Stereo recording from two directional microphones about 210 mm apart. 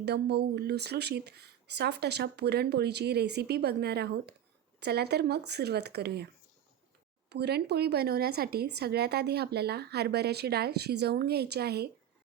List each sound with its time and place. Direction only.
0.0 s speech: 50° right (ahead or behind)
7.3 s speech: 50° right (ahead or behind)